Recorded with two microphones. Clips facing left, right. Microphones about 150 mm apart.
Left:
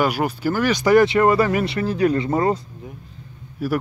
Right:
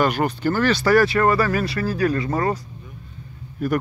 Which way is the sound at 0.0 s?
10° left (ahead or behind).